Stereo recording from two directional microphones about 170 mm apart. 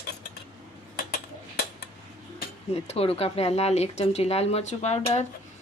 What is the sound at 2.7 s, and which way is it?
Speech, 35° left (ahead or behind).